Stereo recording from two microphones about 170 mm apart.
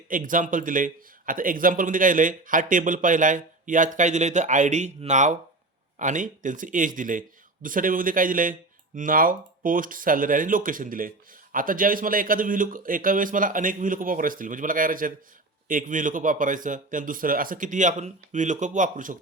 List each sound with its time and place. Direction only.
0.1 s a man's voice: 50° right (ahead or behind)